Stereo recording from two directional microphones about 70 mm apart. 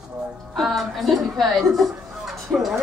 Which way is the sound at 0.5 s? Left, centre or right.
Centre.